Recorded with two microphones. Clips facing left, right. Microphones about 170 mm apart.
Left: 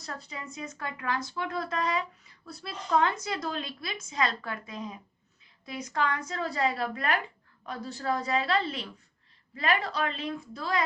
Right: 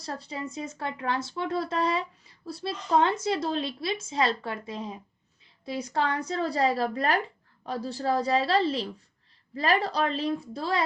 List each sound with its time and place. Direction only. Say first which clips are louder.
0.0 s a woman's voice: right 6 dB; 30° right (ahead or behind)